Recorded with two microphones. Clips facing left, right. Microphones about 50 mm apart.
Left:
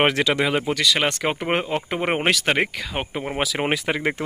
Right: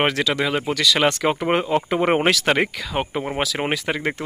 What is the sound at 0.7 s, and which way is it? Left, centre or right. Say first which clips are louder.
Speech: right 2 dB; left.